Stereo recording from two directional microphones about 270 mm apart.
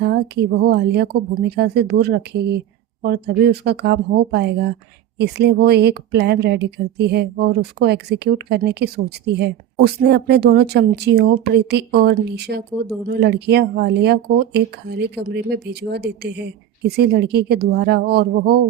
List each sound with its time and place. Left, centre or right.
0.0 s speech: right